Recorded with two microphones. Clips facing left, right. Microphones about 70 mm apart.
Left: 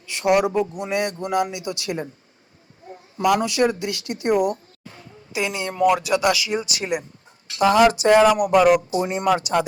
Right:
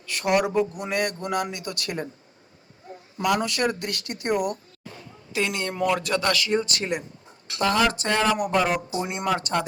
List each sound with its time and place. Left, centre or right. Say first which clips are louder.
0.1 s speech: left 4 dB; centre
3.2 s speech: left 5 dB; centre
5.3 s speech: left 1 dB; centre
8.6 s speech: left 9 dB; left
9.3 s speech: left 4 dB; centre